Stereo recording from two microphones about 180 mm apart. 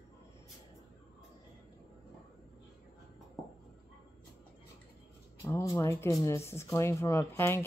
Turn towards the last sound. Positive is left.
turn(degrees=15)  # may be behind; listen again after turning